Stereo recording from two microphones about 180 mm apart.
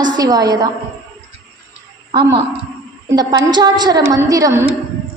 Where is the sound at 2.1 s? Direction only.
25° right (ahead or behind).